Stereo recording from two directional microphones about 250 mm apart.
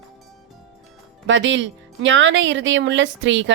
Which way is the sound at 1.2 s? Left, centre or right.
Right.